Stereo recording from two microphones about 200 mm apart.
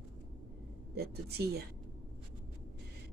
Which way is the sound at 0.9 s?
50° right (ahead or behind).